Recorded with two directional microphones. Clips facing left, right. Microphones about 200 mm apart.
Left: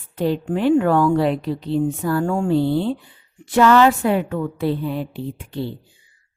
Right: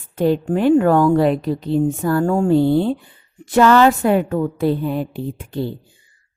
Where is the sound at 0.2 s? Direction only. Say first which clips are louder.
Right 3 dB; 45° right (ahead or behind).